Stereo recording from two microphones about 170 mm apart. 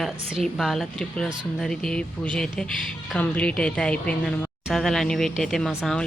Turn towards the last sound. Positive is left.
turn(degrees=0)  # may be behind; listen again after turning